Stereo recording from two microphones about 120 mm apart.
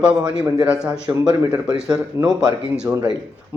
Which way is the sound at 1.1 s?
30° right (ahead or behind).